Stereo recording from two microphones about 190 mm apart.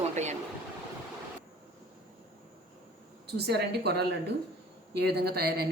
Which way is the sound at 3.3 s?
60° right (ahead or behind).